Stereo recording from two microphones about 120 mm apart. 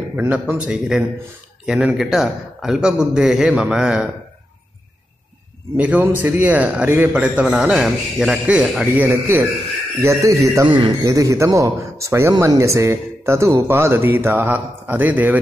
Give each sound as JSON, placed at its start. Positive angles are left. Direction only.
{"t": 0.1, "sound": "a man's voice", "side_deg": -15}
{"t": 5.8, "sound": "a man's voice", "side_deg": -15}
{"t": 7.4, "sound": "a man's voice", "side_deg": 0}
{"t": 10.7, "sound": "a man's voice", "side_deg": -45}
{"t": 11.1, "sound": "speech", "side_deg": -25}